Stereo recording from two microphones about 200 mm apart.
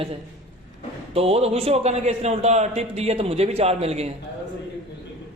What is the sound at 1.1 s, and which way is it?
A man's voice, 30° right (ahead or behind).